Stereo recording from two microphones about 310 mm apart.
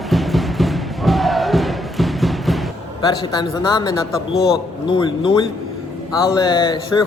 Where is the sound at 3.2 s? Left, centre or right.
Centre.